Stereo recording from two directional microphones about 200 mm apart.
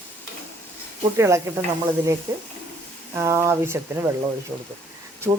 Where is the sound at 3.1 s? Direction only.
15° right (ahead or behind).